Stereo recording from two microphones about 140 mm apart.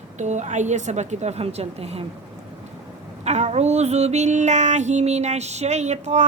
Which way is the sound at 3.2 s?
55° right (ahead or behind).